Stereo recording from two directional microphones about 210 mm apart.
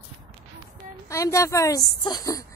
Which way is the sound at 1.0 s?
15° left (ahead or behind).